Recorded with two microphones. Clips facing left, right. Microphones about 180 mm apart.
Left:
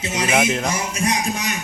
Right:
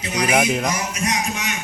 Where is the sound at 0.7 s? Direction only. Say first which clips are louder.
Left 2 dB; 30° left (ahead or behind).